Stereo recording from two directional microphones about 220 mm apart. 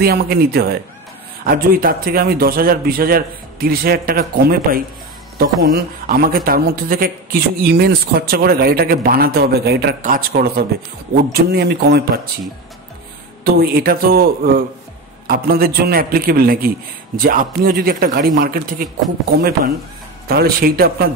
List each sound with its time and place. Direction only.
0.0 s speech: 45° right (ahead or behind)
13.4 s speech: 45° right (ahead or behind)
20.2 s speech: 45° right (ahead or behind)